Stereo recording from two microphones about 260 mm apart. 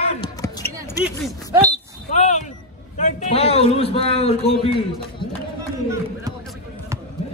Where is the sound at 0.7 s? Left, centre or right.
Centre.